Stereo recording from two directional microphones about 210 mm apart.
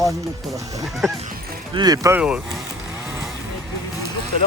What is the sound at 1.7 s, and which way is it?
Speech, 20° right (ahead or behind).